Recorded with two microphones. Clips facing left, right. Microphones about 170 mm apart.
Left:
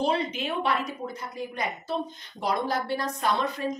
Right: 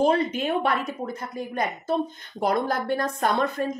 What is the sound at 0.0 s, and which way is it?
A woman's voice, 50° right (ahead or behind).